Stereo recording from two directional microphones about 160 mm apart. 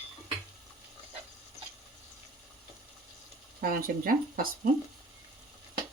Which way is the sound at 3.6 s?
60° right (ahead or behind).